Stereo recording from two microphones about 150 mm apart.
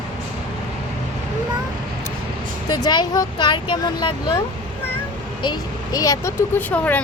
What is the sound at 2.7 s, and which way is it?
Speech, 30° left (ahead or behind).